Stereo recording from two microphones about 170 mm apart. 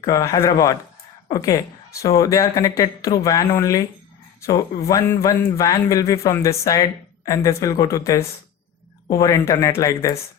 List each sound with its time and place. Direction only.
0.0 s a woman's voice: 20° left (ahead or behind)